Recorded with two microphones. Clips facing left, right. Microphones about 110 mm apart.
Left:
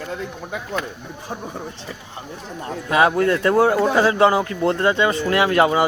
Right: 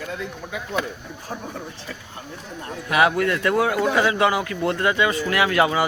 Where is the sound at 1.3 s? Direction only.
20° left (ahead or behind).